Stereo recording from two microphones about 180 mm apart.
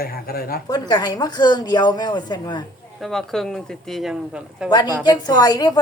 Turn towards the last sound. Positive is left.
turn(degrees=20)  # may be behind; listen again after turning